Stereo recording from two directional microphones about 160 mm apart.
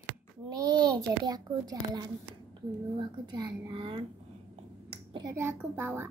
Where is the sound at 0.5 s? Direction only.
25° right (ahead or behind).